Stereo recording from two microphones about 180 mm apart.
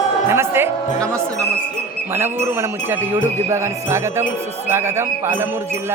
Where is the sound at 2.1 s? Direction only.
15° right (ahead or behind).